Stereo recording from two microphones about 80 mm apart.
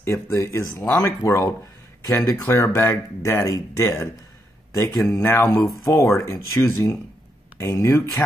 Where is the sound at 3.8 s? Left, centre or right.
Left.